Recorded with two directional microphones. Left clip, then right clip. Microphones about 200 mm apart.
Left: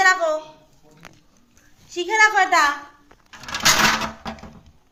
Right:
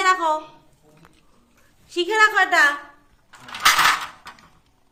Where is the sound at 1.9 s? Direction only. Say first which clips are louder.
Left 1 dB; 25° right (ahead or behind).